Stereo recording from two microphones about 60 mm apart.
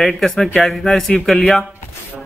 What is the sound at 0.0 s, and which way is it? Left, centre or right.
Speech, centre.